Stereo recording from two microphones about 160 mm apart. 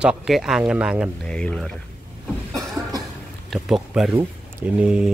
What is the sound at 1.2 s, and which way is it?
Speech, 5° left (ahead or behind).